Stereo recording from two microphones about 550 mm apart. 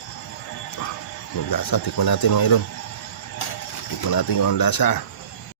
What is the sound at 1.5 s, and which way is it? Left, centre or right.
Speech, left.